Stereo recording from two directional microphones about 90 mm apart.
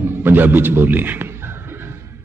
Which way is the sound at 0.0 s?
25° right (ahead or behind).